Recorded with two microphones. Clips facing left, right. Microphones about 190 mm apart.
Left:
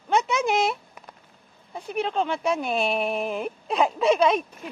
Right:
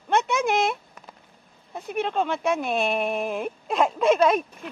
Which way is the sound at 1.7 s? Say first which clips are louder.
Even; centre (ahead or behind).